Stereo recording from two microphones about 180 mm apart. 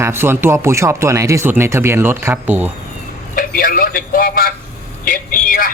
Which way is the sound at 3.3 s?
50° left (ahead or behind).